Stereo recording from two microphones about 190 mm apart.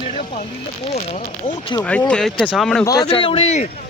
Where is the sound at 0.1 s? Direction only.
35° left (ahead or behind).